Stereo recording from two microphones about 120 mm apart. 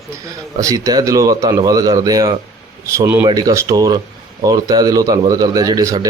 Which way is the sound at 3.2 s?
30° right (ahead or behind).